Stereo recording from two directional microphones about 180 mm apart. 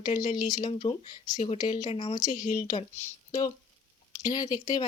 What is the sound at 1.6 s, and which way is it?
Speech, 20° left (ahead or behind).